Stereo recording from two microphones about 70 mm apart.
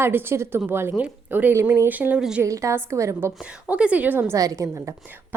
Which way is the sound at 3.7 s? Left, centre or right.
Centre.